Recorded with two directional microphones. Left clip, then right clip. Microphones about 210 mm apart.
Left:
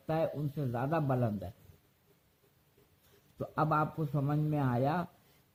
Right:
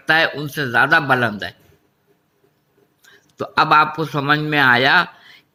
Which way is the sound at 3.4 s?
30° right (ahead or behind).